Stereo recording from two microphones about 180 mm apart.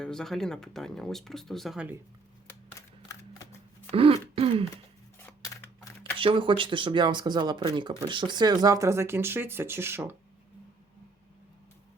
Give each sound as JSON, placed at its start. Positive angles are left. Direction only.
{"t": 0.0, "sound": "speech", "side_deg": 5}
{"t": 3.1, "sound": "shuffling cards", "side_deg": 15}
{"t": 3.9, "sound": "throat clearing", "side_deg": -30}
{"t": 5.2, "sound": "a sound", "side_deg": 15}
{"t": 6.1, "sound": "speech", "side_deg": -30}